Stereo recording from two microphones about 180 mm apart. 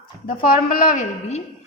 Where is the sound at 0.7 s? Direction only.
50° left (ahead or behind).